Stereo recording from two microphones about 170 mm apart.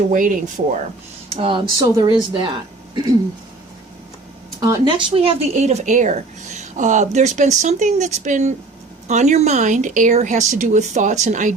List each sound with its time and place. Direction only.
0.1 s speech: 50° right (ahead or behind)
1.3 s speech: 30° right (ahead or behind)
4.6 s speech: 25° right (ahead or behind); by 11.5 s 45° right (ahead or behind)